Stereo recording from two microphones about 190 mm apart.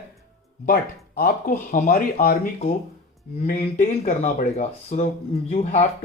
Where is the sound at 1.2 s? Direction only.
50° left (ahead or behind).